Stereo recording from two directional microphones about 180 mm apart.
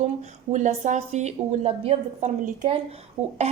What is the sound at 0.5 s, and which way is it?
A woman's voice, 40° right (ahead or behind).